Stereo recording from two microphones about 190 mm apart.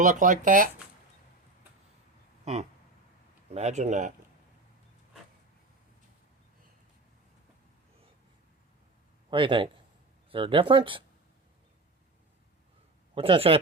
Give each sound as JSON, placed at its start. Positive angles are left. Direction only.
{"t": 0.0, "sound": "speech", "side_deg": -40}
{"t": 2.4, "sound": "a sound", "side_deg": -35}
{"t": 3.5, "sound": "speech", "side_deg": -35}
{"t": 9.3, "sound": "speech", "side_deg": -25}
{"t": 13.1, "sound": "speech", "side_deg": -30}